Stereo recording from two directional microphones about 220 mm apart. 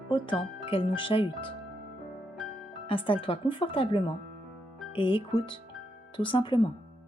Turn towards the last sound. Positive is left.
turn(degrees=20)  # may be behind; listen again after turning